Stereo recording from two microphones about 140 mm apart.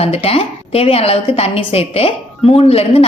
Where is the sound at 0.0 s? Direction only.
45° left (ahead or behind).